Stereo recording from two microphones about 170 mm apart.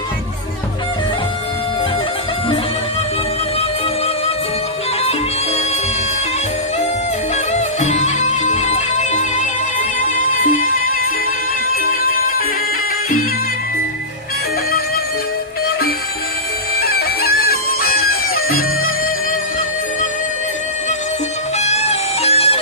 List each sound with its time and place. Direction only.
7.5 s music: 40° left (ahead or behind)
16.8 s bagpipes: 65° left (ahead or behind)
21.6 s music: 40° left (ahead or behind)